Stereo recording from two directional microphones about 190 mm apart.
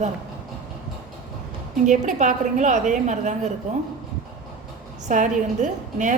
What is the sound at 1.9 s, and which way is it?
A woman's voice, 40° right (ahead or behind).